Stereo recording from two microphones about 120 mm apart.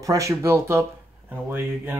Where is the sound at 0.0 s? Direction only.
30° right (ahead or behind).